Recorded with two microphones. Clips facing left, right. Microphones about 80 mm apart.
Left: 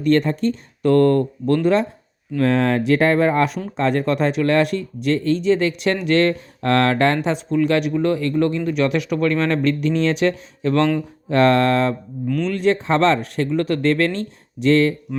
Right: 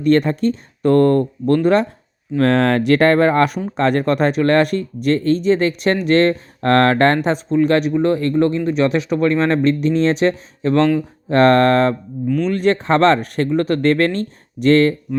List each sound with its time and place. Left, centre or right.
0.0 s speech: right
0.8 s speech: right
2.4 s speech: right
13.5 s speech: right